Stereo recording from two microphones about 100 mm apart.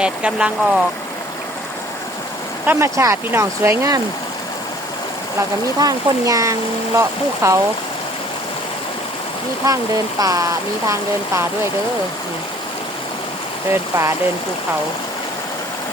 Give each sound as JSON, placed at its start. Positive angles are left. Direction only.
{"t": 0.0, "sound": "speech", "side_deg": -10}
{"t": 2.6, "sound": "speech", "side_deg": -30}
{"t": 5.4, "sound": "speech", "side_deg": -35}
{"t": 9.6, "sound": "speech", "side_deg": -35}
{"t": 13.7, "sound": "speech", "side_deg": -30}